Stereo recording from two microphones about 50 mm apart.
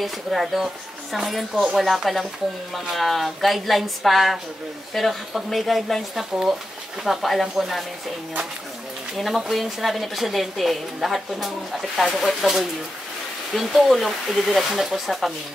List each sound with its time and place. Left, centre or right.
0.0 s a woman's voice: centre
9.1 s a woman's voice: centre